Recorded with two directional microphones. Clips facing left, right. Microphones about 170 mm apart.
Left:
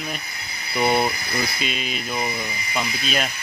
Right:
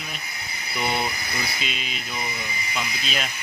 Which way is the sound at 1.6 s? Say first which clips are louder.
Left 5 dB; 50° left (ahead or behind).